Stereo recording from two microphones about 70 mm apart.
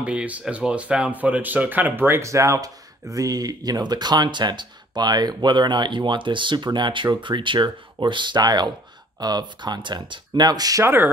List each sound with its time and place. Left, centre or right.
0.0 s speech: centre
2.2 s speech: right
10.8 s speech: right